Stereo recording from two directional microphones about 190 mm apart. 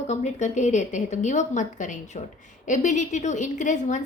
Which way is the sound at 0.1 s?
40° left (ahead or behind).